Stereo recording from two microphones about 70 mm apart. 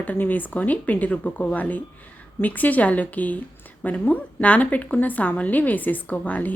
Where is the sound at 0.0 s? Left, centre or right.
Left.